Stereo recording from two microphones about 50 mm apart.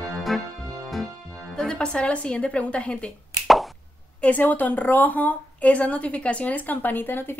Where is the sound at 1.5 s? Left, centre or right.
Centre.